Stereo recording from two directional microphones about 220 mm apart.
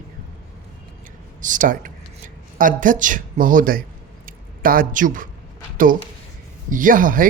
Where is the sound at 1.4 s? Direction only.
35° right (ahead or behind).